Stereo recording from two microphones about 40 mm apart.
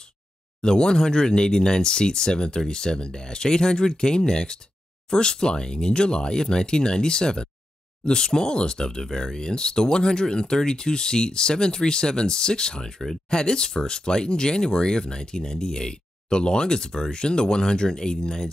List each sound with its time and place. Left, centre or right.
0.6 s speech: left